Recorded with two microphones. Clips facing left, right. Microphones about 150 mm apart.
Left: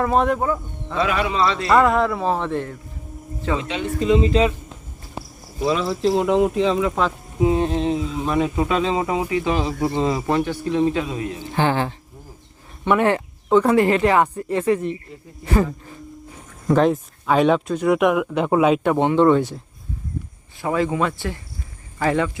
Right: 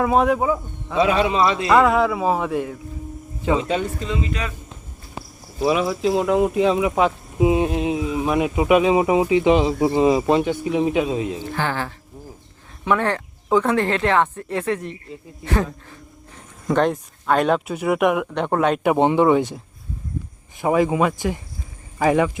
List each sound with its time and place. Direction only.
0.0 s speech: 5° right (ahead or behind)
0.9 s a man's voice: 20° right (ahead or behind)
1.7 s speech: 5° right (ahead or behind)
4.2 s speech: 25° left (ahead or behind)
5.6 s a man's voice: 15° right (ahead or behind)
11.5 s speech: 20° left (ahead or behind)
13.0 s speech: 15° left (ahead or behind)
13.5 s speech: centre (ahead or behind)
18.8 s speech: 15° right (ahead or behind)
20.6 s speech: 15° right (ahead or behind)